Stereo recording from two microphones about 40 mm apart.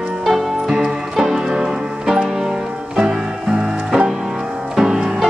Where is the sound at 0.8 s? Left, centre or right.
Centre.